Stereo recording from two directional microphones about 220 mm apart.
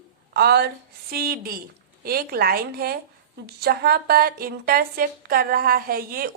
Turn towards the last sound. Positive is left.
turn(degrees=-40)  # may be behind; listen again after turning